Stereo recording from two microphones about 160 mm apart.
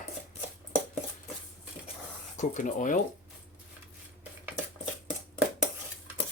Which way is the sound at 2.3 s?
50° left (ahead or behind).